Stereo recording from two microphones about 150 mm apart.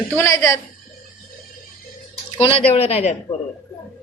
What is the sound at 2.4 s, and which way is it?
Speech, 40° left (ahead or behind).